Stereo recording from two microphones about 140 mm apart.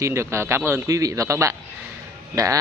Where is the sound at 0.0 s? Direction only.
20° right (ahead or behind).